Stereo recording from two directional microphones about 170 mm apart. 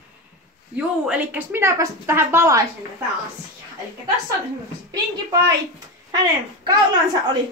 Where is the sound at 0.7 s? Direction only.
10° right (ahead or behind).